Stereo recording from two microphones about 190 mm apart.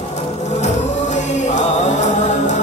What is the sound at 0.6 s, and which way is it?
Music, 40° left (ahead or behind).